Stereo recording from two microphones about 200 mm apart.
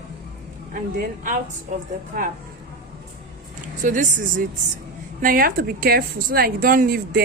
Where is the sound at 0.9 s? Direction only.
40° right (ahead or behind).